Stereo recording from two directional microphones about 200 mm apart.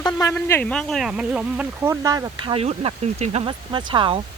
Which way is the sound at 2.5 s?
30° right (ahead or behind).